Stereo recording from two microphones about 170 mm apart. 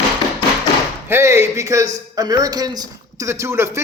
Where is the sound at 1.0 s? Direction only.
15° right (ahead or behind).